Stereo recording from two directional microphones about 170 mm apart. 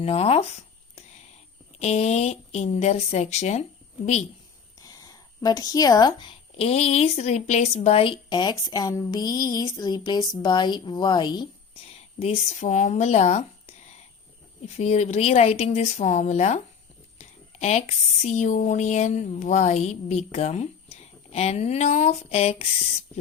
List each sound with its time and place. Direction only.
0.0 s speech: 35° left (ahead or behind)
1.8 s speech: 40° left (ahead or behind)
4.8 s speech: 20° left (ahead or behind); by 13.7 s 40° left (ahead or behind)
14.8 s speech: 40° left (ahead or behind)